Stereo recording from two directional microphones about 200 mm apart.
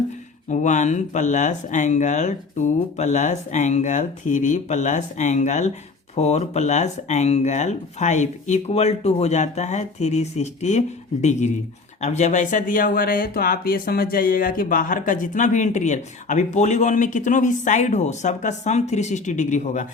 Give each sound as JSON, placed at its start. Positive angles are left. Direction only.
{"t": 0.4, "sound": "speech", "side_deg": 35}